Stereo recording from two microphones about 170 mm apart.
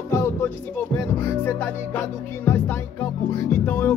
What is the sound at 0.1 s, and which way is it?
Music, 15° left (ahead or behind).